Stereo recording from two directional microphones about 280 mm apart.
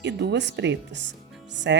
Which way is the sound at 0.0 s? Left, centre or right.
Right.